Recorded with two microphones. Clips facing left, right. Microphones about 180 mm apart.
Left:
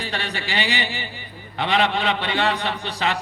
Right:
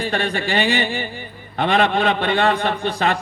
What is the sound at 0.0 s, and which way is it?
A man's voice, 50° right (ahead or behind).